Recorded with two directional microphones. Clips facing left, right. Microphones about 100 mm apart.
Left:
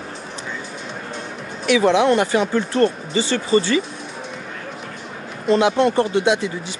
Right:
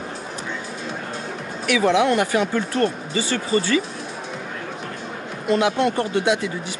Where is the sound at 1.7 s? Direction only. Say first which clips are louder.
Left 3 dB; 25° left (ahead or behind).